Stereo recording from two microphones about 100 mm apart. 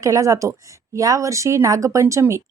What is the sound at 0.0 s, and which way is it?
Speech, 35° right (ahead or behind).